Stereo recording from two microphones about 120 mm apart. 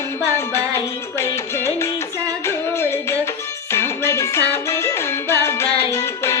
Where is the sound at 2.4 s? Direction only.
20° left (ahead or behind).